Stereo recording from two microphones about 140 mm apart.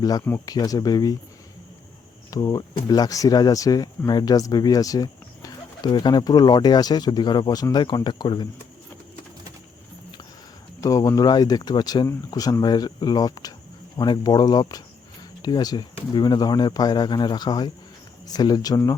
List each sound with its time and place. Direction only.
0.0 s speech: 25° left (ahead or behind)
2.3 s speech: 25° left (ahead or behind)
10.8 s speech: 25° left (ahead or behind)